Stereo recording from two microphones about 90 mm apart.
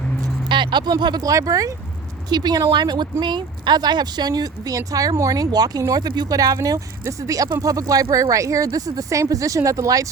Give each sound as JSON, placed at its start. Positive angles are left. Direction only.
{"t": 0.4, "sound": "a woman's voice", "side_deg": -60}